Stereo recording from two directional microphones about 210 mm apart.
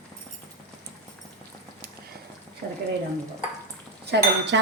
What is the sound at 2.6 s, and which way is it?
Speech, 50° right (ahead or behind).